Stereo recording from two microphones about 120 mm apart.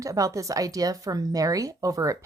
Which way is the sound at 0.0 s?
30° right (ahead or behind).